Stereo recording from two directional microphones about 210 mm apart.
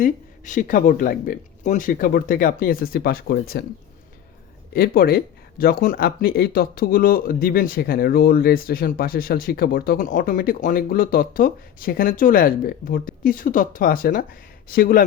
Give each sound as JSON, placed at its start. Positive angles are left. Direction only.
{"t": 0.0, "sound": "speech", "side_deg": 35}
{"t": 4.7, "sound": "speech", "side_deg": 45}